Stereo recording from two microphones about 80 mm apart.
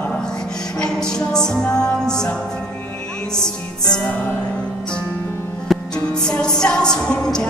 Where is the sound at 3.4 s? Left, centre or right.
Left.